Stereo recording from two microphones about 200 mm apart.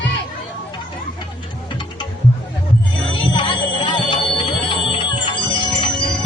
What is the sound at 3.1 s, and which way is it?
Music, 25° left (ahead or behind).